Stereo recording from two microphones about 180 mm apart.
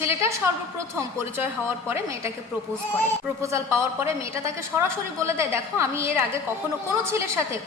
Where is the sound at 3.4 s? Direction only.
15° right (ahead or behind).